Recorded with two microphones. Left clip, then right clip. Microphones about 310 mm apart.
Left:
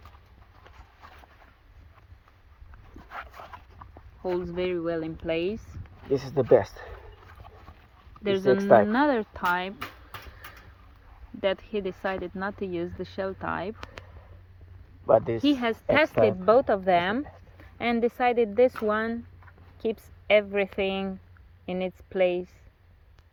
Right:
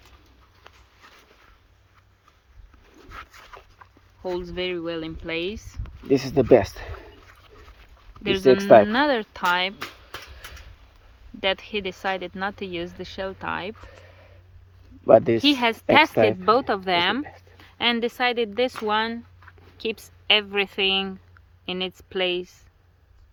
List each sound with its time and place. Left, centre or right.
1.0 s a sound: centre
3.1 s dog: centre
4.2 s speech: centre
6.1 s speech: right
8.2 s speech: centre
8.6 s speech: right
8.9 s speech: centre
11.3 s speech: centre
15.0 s speech: right
15.4 s a woman's voice: centre